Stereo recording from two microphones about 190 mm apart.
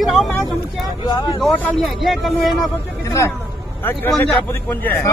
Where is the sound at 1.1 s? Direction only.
20° left (ahead or behind).